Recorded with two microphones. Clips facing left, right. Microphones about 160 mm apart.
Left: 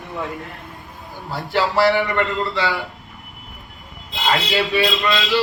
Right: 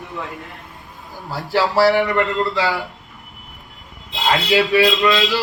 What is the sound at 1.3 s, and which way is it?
Speech, 40° right (ahead or behind).